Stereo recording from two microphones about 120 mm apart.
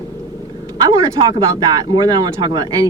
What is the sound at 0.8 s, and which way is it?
Speech, 30° right (ahead or behind).